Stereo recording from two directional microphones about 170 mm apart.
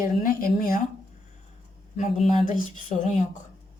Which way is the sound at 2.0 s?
45° left (ahead or behind).